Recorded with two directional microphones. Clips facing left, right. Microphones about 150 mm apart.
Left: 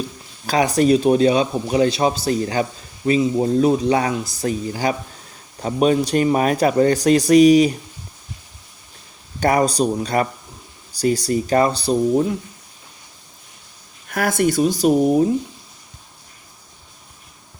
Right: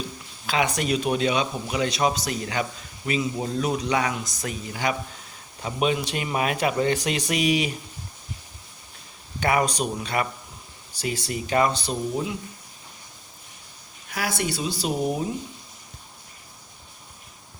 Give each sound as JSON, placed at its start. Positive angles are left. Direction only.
{"t": 0.4, "sound": "speech", "side_deg": 35}
{"t": 3.4, "sound": "speech", "side_deg": 40}
{"t": 9.4, "sound": "speech", "side_deg": 35}
{"t": 14.1, "sound": "speech", "side_deg": 50}